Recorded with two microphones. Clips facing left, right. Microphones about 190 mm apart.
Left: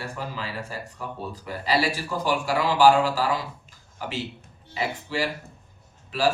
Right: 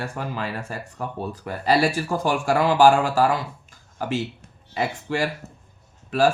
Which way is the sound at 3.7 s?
50° right (ahead or behind).